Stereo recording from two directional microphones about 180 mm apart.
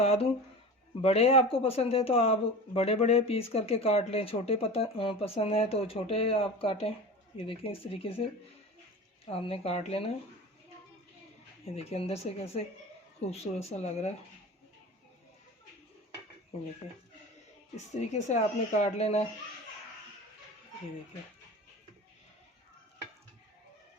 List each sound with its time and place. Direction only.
0.0 s speech: 35° left (ahead or behind)
9.2 s speech: 35° left (ahead or behind)
11.6 s speech: 35° left (ahead or behind)
17.7 s speech: 40° left (ahead or behind)